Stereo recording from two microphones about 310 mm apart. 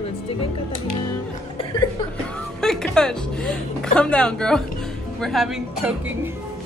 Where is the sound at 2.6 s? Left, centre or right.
Centre.